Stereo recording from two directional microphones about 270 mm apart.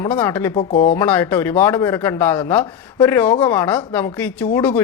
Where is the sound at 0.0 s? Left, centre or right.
Centre.